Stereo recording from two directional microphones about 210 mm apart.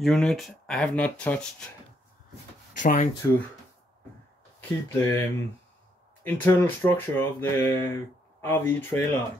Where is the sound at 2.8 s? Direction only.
35° left (ahead or behind).